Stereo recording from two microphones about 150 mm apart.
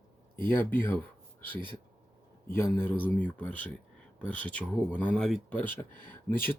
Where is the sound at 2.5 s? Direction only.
15° left (ahead or behind).